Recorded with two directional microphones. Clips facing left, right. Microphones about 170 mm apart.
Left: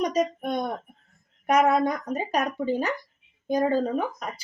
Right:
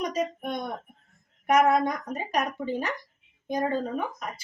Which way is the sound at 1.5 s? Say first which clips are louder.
Left 1 dB; 35° left (ahead or behind).